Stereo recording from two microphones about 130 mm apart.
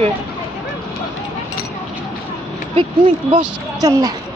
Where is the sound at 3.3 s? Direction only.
25° right (ahead or behind).